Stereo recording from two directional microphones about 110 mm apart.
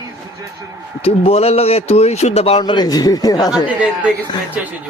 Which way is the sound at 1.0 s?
65° left (ahead or behind).